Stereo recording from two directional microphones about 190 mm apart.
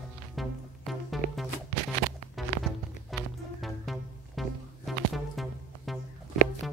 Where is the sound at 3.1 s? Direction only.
Centre (ahead or behind).